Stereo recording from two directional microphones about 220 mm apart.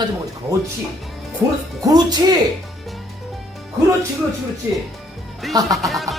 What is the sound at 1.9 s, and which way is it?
Speech, 20° right (ahead or behind).